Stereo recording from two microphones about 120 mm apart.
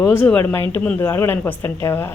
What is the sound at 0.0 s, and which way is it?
A woman's voice, 15° left (ahead or behind).